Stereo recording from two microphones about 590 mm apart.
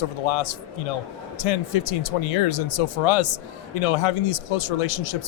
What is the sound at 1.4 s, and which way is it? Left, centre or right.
Speech, left.